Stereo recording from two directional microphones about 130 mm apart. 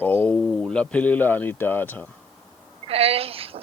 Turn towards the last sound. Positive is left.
turn(degrees=-50)  # may be behind; listen again after turning